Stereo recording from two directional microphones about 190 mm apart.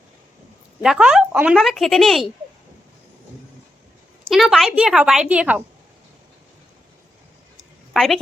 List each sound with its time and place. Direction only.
0.8 s speech: 5° right (ahead or behind)
4.3 s a woman's voice: centre (ahead or behind)
7.9 s speech: centre (ahead or behind)